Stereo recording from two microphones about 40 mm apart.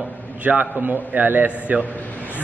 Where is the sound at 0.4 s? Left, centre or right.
Right.